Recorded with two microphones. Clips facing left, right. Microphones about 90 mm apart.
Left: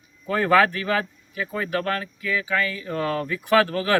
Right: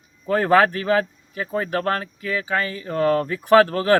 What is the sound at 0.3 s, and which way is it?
Speech, 40° right (ahead or behind).